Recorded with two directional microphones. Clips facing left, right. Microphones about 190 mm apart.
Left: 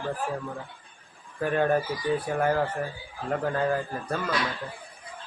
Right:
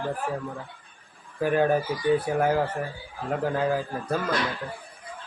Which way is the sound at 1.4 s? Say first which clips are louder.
Right 2 dB; 5° right (ahead or behind).